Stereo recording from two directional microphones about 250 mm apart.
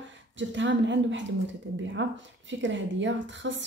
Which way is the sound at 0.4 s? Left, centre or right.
Right.